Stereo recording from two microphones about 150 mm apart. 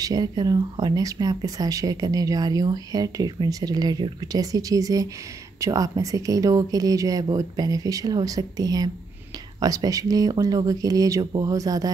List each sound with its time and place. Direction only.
0.0 s speech: 25° right (ahead or behind)